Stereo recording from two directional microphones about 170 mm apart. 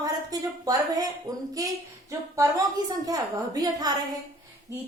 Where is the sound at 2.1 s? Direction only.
20° right (ahead or behind).